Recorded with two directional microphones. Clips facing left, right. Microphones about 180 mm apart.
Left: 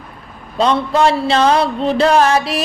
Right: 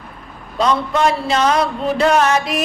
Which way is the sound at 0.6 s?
30° left (ahead or behind).